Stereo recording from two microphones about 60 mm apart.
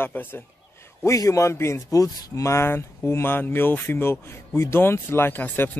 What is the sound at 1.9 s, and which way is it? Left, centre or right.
Speech, left.